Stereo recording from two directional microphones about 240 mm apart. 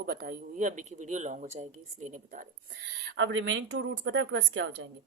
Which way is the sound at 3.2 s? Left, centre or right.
Right.